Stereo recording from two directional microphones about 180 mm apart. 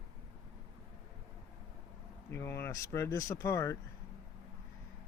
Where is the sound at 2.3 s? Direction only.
15° left (ahead or behind).